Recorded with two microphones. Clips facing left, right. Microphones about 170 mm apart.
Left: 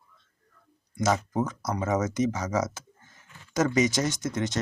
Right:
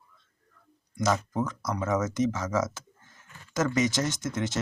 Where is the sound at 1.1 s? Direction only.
15° left (ahead or behind).